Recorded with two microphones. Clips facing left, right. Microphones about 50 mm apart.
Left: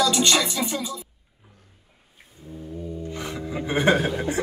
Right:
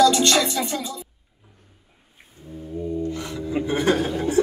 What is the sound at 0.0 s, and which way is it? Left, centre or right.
Music, centre.